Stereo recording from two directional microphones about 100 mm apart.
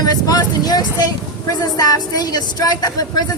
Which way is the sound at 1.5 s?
40° left (ahead or behind).